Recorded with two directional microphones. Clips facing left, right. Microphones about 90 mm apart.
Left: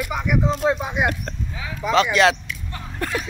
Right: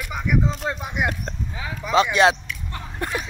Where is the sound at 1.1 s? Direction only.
25° right (ahead or behind).